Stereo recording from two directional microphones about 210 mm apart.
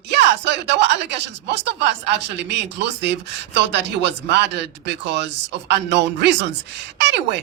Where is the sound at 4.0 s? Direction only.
55° right (ahead or behind).